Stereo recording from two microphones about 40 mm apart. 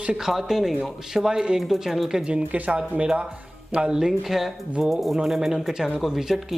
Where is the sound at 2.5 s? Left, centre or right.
Right.